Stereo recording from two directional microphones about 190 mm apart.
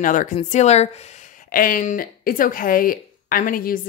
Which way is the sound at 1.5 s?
45° left (ahead or behind).